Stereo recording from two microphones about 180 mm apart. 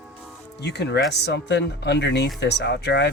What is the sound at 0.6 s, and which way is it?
Speech, 70° left (ahead or behind).